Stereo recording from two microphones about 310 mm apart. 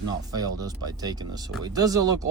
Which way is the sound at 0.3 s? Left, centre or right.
Centre.